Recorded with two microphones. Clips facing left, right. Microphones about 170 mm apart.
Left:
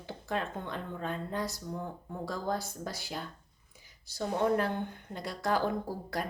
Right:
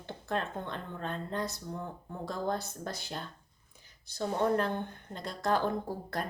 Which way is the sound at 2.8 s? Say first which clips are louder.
Even; 10° left (ahead or behind).